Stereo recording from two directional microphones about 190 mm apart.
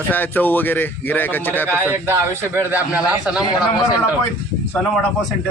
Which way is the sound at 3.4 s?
20° left (ahead or behind).